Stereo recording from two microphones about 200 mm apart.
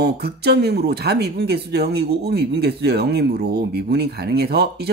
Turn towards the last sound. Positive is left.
turn(degrees=-50)  # may be behind; listen again after turning